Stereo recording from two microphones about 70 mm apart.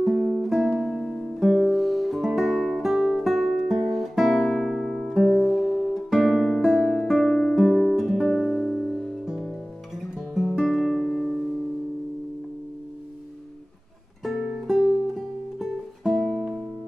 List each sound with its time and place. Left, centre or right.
0.0 s music: centre
6.0 s music: centre
10.1 s guitar: centre
14.2 s music: centre
16.2 s music: centre